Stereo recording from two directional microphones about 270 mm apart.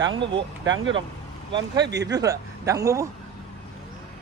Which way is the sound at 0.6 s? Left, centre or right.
Right.